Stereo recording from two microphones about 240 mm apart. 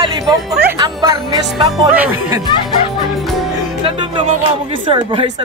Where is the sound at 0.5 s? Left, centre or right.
Centre.